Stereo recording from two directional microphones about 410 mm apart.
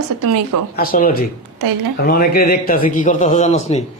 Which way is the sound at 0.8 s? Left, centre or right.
Left.